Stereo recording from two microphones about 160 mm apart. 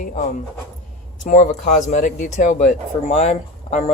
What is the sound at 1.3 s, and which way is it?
Speech, 45° left (ahead or behind).